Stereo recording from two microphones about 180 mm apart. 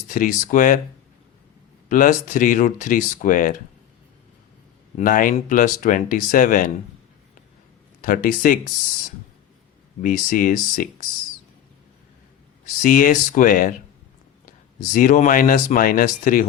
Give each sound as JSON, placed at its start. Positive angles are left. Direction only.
{"t": 0.1, "sound": "speech", "side_deg": 45}
{"t": 1.9, "sound": "speech", "side_deg": 45}
{"t": 4.9, "sound": "speech", "side_deg": 50}
{"t": 8.0, "sound": "speech", "side_deg": 50}
{"t": 10.0, "sound": "speech", "side_deg": 50}
{"t": 12.8, "sound": "speech", "side_deg": 50}
{"t": 14.9, "sound": "speech", "side_deg": 45}